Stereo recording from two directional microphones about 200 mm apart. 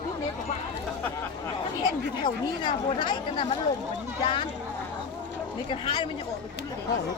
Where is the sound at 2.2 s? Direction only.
25° left (ahead or behind).